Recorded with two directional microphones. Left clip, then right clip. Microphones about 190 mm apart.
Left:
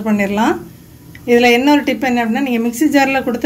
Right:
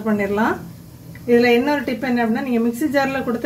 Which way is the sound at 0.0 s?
40° left (ahead or behind).